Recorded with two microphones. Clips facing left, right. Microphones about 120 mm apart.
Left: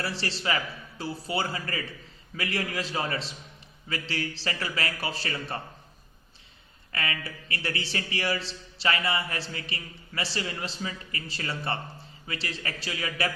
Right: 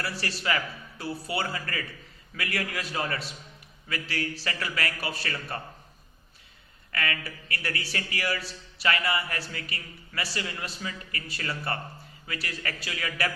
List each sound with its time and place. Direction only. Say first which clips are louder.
0.0 s a man's voice: left 1 dB; 25° left (ahead or behind)
6.9 s a man's voice: right 1 dB; 25° left (ahead or behind)